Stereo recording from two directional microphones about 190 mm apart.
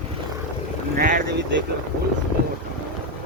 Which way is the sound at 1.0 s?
50° right (ahead or behind).